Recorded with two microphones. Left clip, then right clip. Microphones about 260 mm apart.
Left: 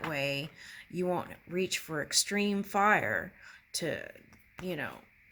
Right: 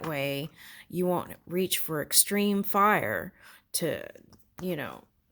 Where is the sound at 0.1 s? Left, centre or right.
Right.